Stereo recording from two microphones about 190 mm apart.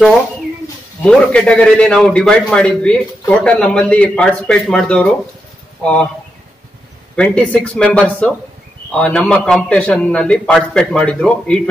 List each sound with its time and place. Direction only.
1.0 s a man's voice: 5° left (ahead or behind)
7.2 s a man's voice: 5° left (ahead or behind)